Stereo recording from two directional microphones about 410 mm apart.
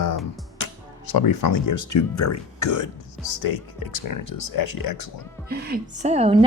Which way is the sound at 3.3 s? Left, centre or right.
Left.